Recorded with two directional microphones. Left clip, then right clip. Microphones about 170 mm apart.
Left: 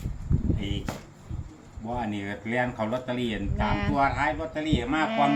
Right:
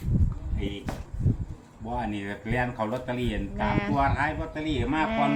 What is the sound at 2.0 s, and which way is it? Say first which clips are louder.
Speech: right 1 dB; 5° left (ahead or behind).